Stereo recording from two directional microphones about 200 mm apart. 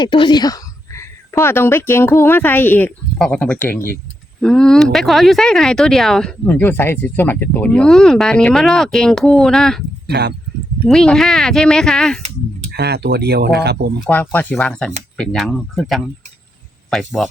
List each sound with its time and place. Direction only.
0.0 s a woman's voice: 25° left (ahead or behind); by 9.8 s centre (ahead or behind)
10.1 s speech: 55° right (ahead or behind)
10.8 s speech: centre (ahead or behind)
12.7 s speech: 55° right (ahead or behind)
14.0 s speech: 10° left (ahead or behind)